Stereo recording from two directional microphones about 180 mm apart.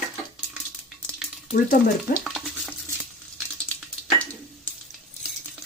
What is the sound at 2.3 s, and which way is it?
Stir, centre (ahead or behind).